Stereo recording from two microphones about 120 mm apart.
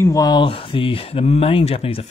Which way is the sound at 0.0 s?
30° left (ahead or behind).